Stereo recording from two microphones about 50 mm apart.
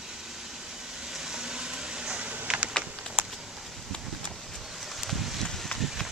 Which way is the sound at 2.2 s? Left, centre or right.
Right.